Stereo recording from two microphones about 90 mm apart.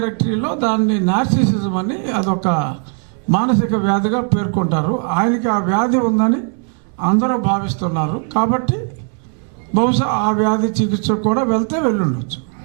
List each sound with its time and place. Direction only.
0.0 s a man's voice: 15° right (ahead or behind)